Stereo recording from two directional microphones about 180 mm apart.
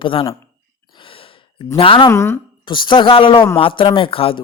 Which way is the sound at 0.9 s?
30° left (ahead or behind).